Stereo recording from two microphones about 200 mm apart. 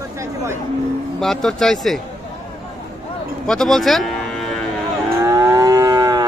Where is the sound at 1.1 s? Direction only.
Centre (ahead or behind).